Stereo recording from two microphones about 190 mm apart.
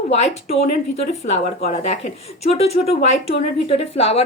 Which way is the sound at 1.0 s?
35° left (ahead or behind).